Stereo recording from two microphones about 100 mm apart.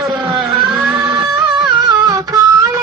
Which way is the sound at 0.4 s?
40° right (ahead or behind).